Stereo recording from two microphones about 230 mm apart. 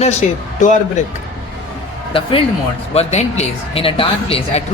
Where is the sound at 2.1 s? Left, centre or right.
Left.